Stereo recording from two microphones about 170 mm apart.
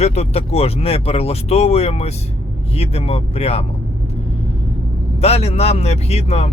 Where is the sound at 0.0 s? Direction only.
40° left (ahead or behind).